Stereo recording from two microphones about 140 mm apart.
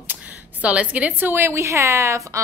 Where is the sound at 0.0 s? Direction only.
10° right (ahead or behind).